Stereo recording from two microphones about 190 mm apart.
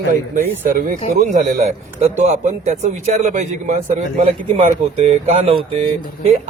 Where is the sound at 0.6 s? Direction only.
45° right (ahead or behind).